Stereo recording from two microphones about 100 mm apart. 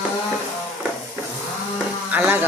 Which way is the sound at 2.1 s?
15° right (ahead or behind).